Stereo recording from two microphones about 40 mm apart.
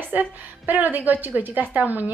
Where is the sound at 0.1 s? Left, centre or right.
Right.